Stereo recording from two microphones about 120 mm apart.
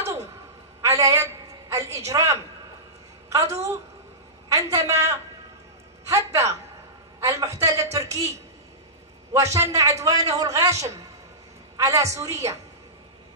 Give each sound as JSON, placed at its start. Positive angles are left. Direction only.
{"t": 0.8, "sound": "a woman's voice", "side_deg": -25}
{"t": 9.3, "sound": "a man's voice", "side_deg": -25}